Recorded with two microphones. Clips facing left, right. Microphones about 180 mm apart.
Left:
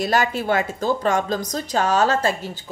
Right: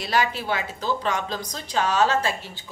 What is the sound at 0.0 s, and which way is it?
Speech, 45° left (ahead or behind).